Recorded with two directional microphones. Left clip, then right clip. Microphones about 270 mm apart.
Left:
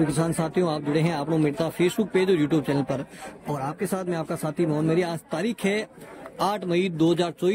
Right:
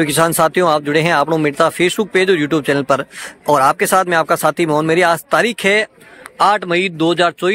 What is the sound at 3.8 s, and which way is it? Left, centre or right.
Speech, right.